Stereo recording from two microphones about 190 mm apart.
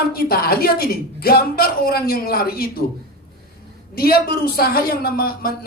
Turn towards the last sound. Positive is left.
turn(degrees=50)  # may be behind; listen again after turning